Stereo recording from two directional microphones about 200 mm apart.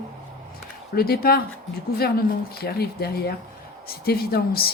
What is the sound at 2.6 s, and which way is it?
Speech, 50° left (ahead or behind).